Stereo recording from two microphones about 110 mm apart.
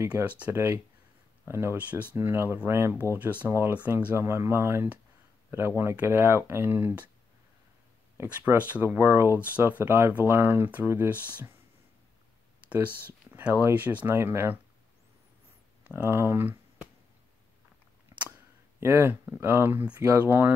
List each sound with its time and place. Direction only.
0.0 s speech: 15° right (ahead or behind)
8.2 s speech: 15° right (ahead or behind)
12.6 s speech: 15° right (ahead or behind)
15.9 s speech: 20° right (ahead or behind)
18.1 s a sound: 30° right (ahead or behind)
18.8 s speech: 20° right (ahead or behind)